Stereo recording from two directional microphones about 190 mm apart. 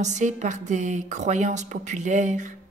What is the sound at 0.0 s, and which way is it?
Speech, 40° right (ahead or behind).